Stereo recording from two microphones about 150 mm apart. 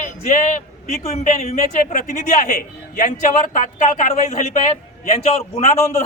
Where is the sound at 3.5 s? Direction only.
55° left (ahead or behind).